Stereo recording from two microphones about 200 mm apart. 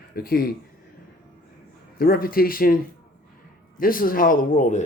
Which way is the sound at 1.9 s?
45° left (ahead or behind).